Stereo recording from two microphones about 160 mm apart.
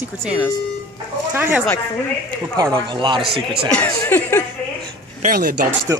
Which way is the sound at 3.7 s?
15° left (ahead or behind).